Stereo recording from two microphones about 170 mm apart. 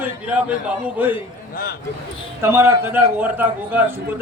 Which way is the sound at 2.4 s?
15° right (ahead or behind).